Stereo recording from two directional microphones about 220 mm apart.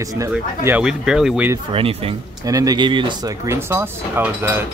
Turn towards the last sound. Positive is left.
turn(degrees=-10)  # may be behind; listen again after turning